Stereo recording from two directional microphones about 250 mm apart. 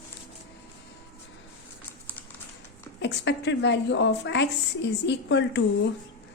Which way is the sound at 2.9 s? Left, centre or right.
Left.